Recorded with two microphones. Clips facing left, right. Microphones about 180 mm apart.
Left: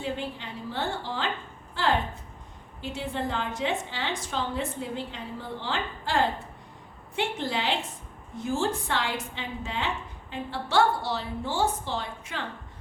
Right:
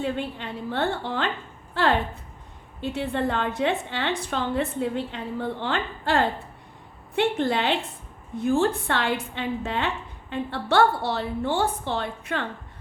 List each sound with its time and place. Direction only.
0.0 s a woman's voice: 60° right (ahead or behind)